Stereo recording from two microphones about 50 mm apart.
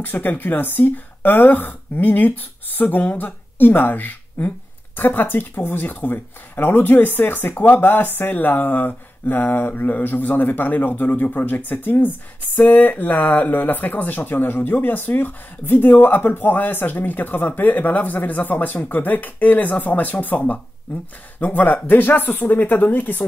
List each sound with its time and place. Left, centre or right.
0.0 s speech: left
21.4 s speech: left